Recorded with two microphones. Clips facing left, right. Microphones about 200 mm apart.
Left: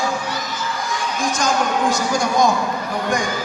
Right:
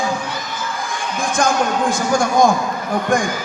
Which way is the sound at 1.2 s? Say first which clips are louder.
Right 3 dB; 55° right (ahead or behind).